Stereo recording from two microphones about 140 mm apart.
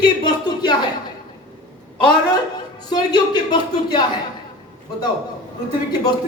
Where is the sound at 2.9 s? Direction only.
30° left (ahead or behind).